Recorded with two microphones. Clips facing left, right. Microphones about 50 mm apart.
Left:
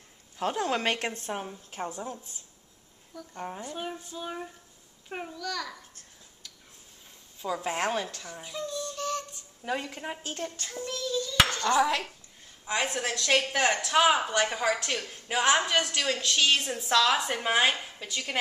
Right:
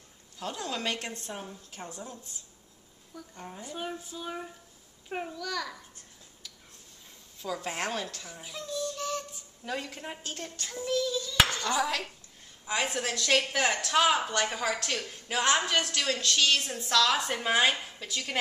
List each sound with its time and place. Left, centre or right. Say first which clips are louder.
0.4 s a woman's voice: left 6 dB; left
3.3 s a woman's voice: left 7 dB; left
3.6 s speech: left 1 dB; centre
7.4 s a woman's voice: left 4 dB; centre
8.3 s a sound: left 3 dB; centre
9.7 s a woman's voice: left 3 dB; centre
11.8 s a woman's voice: left 4 dB; centre
12.6 s a woman's voice: left 1 dB; centre